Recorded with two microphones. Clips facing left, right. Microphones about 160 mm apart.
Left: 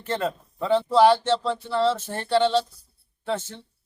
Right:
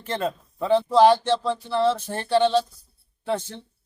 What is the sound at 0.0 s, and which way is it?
Speech, 15° right (ahead or behind).